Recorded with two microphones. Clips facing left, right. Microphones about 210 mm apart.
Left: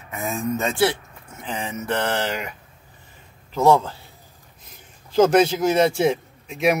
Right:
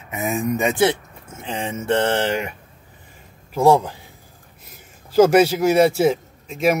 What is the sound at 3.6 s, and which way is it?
Speech, 15° right (ahead or behind).